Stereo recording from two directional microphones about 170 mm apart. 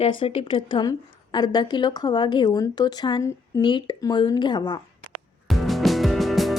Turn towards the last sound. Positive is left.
turn(degrees=0)  # may be behind; listen again after turning